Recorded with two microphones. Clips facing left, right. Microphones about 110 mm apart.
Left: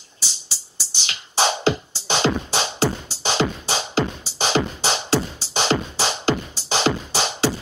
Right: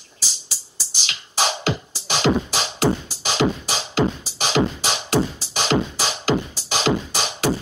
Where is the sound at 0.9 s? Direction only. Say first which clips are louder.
Even; 30° left (ahead or behind).